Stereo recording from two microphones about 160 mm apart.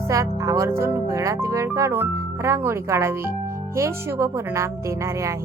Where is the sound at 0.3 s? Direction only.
20° right (ahead or behind).